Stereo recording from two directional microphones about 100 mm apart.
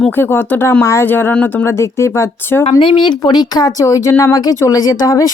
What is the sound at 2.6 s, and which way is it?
Speech, 55° left (ahead or behind).